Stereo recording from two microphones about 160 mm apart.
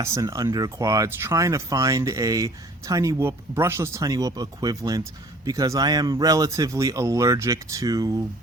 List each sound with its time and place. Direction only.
0.0 s speech: 20° right (ahead or behind)